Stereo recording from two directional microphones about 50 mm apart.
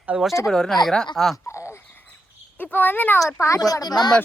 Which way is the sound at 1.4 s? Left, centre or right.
Left.